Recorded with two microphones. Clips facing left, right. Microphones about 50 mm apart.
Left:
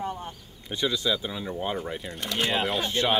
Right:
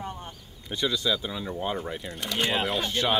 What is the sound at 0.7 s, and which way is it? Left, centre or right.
Speech, centre.